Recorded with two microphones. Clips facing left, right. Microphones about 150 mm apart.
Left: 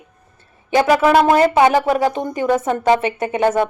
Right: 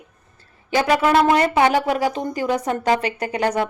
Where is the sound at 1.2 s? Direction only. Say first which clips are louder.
Left 3 dB; 30° left (ahead or behind).